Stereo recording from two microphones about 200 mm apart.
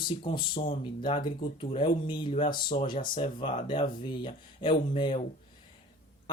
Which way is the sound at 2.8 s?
45° left (ahead or behind).